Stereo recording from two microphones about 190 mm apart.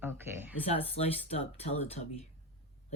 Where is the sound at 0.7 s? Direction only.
30° left (ahead or behind).